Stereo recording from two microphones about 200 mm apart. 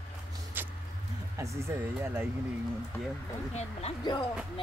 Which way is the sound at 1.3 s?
15° right (ahead or behind).